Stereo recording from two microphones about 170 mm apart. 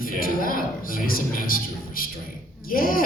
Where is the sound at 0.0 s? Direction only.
55° left (ahead or behind).